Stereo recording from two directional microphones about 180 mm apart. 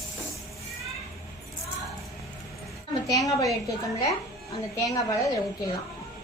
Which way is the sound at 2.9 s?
20° left (ahead or behind).